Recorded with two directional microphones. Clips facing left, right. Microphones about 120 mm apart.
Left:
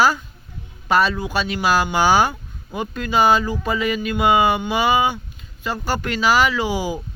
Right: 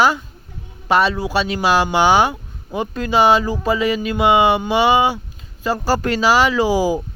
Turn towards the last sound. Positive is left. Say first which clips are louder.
# right 6 dB
turn(degrees=-35)  # may be behind; listen again after turning